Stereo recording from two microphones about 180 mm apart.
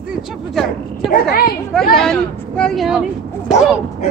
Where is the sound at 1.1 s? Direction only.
55° left (ahead or behind).